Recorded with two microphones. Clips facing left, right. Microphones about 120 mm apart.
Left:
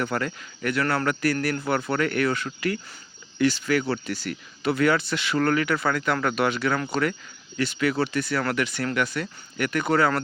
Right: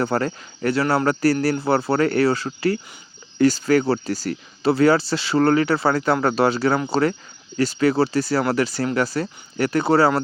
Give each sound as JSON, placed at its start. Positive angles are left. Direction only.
{"t": 0.0, "sound": "speech", "side_deg": -35}